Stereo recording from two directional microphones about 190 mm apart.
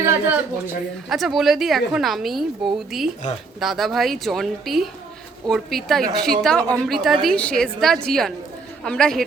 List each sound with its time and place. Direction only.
0.0 s a sound: 10° right (ahead or behind)
1.1 s a woman's voice: centre (ahead or behind)
6.0 s a woman's voice: 50° right (ahead or behind)
6.4 s a woman's voice: 5° left (ahead or behind)